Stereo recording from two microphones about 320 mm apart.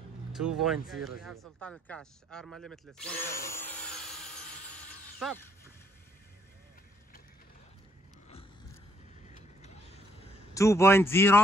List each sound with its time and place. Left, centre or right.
0.3 s speech: centre
3.4 s a sound: centre
10.5 s speech: centre